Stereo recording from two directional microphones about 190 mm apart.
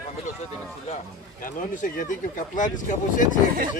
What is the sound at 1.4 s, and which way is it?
Speech, 45° left (ahead or behind).